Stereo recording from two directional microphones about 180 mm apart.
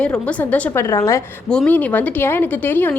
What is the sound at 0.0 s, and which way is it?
A woman's voice, 5° left (ahead or behind).